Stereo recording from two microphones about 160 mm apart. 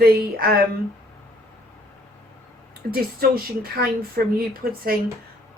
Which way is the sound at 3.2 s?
70° right (ahead or behind).